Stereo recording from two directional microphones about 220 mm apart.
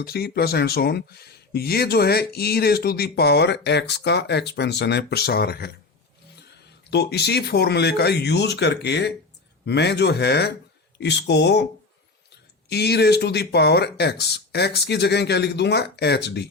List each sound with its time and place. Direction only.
0.0 s speech: 45° left (ahead or behind)
6.9 s speech: 50° left (ahead or behind)